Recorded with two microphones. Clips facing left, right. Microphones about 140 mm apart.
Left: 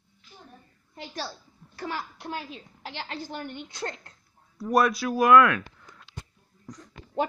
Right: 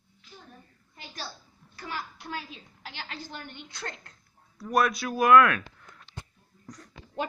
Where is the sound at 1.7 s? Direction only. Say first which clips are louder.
Left 4 dB; 30° left (ahead or behind).